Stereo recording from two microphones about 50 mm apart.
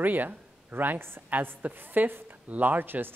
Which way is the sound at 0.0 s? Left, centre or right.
Right.